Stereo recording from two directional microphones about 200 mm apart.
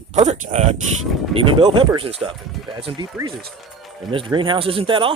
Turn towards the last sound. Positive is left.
turn(degrees=-25)  # may be behind; listen again after turning